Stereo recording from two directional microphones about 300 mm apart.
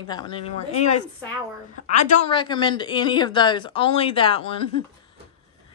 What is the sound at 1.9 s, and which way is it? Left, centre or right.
A woman's voice, left.